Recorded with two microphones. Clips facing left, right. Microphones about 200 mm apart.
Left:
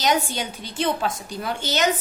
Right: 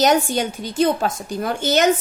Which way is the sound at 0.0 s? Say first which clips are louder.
Right 6 dB; 50° right (ahead or behind).